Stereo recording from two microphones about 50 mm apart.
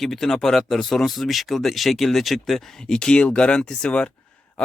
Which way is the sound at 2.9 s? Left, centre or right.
Centre.